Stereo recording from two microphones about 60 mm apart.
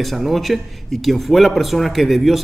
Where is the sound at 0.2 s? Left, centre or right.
Centre.